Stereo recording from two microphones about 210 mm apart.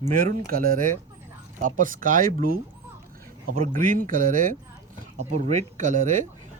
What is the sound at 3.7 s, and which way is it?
Speech, 40° right (ahead or behind).